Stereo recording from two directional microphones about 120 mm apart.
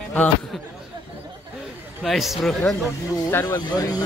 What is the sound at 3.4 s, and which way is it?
Speech, 35° left (ahead or behind).